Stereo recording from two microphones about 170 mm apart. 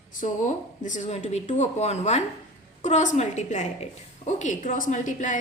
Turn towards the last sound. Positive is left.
turn(degrees=50)  # may be behind; listen again after turning